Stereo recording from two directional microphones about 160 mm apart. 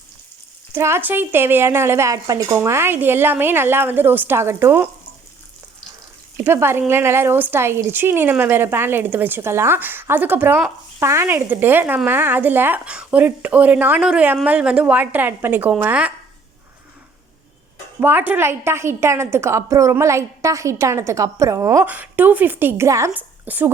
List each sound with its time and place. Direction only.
0.7 s a woman's voice: 15° right (ahead or behind)
6.3 s a woman's voice: 15° right (ahead or behind)
18.0 s a woman's voice: 10° right (ahead or behind)